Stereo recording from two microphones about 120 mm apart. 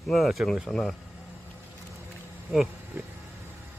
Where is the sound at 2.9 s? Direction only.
20° right (ahead or behind).